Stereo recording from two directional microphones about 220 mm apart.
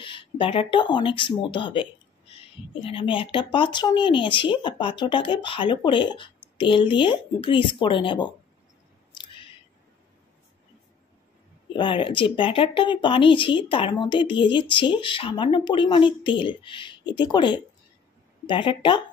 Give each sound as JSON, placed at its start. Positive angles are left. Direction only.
{"t": 0.0, "sound": "speech", "side_deg": 25}
{"t": 9.1, "sound": "a sound", "side_deg": 20}
{"t": 11.7, "sound": "speech", "side_deg": 20}